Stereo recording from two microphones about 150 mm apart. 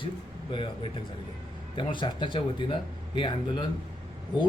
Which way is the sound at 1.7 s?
30° left (ahead or behind).